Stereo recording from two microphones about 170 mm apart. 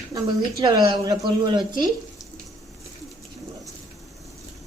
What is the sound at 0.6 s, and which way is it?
Speech, 20° right (ahead or behind).